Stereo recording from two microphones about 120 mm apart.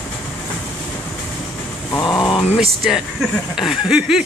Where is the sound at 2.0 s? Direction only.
30° left (ahead or behind).